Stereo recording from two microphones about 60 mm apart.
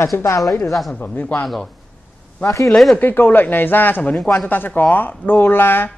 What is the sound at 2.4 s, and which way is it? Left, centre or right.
Speech, left.